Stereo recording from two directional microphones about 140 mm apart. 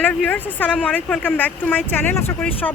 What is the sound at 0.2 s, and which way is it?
Speech, 15° left (ahead or behind).